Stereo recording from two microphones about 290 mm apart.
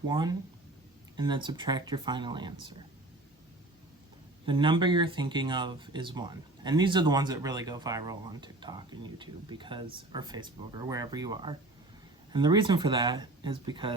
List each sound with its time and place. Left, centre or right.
0.1 s speech: centre
4.4 s speech: centre